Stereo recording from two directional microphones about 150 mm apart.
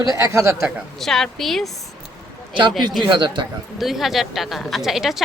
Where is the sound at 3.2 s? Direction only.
30° right (ahead or behind).